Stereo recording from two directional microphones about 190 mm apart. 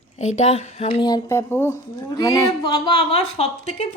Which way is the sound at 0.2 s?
40° left (ahead or behind).